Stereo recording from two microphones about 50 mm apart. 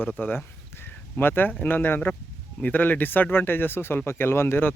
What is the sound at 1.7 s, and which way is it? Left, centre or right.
Speech, left.